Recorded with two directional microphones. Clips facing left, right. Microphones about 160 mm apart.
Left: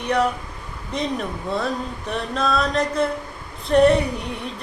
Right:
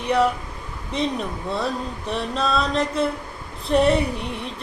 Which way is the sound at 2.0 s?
Centre (ahead or behind).